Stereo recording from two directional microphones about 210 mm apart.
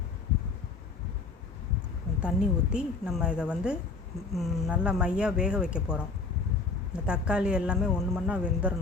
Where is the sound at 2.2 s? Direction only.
5° right (ahead or behind).